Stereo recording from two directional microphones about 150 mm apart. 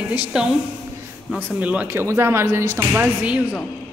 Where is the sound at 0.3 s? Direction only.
5° right (ahead or behind).